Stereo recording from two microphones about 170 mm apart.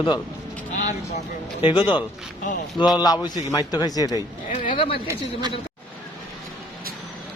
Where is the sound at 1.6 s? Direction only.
30° left (ahead or behind).